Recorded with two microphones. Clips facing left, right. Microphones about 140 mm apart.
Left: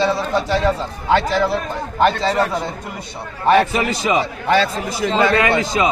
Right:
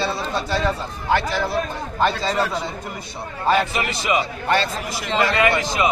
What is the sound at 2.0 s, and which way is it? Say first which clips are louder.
Speech: left 4 dB; 65° left (ahead or behind).